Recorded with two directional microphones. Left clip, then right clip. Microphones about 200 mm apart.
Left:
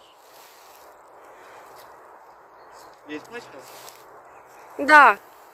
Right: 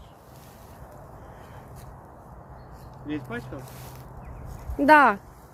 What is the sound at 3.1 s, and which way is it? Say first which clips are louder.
Speech: right 2 dB; 30° left (ahead or behind).